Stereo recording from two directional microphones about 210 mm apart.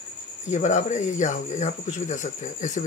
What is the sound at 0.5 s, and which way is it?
Speech, 35° left (ahead or behind).